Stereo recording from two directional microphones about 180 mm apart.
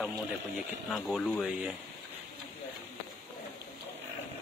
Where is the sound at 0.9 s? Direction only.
Centre (ahead or behind).